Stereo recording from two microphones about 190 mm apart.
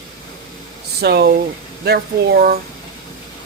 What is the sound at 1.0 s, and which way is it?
Speech, 55° right (ahead or behind).